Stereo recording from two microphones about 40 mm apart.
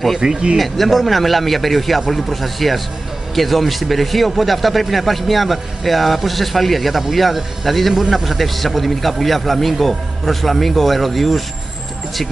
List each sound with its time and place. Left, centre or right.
0.2 s speech: right
0.6 s speech: centre